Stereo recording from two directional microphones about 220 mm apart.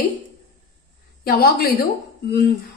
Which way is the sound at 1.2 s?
45° left (ahead or behind).